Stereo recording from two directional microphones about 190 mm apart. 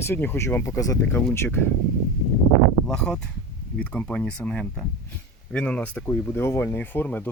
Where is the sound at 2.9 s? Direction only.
5° left (ahead or behind).